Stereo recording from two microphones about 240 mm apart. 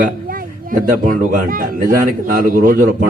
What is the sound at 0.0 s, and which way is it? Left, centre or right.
A man's voice, right.